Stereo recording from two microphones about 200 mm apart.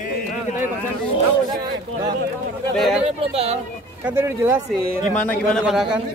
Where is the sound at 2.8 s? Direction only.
Centre (ahead or behind).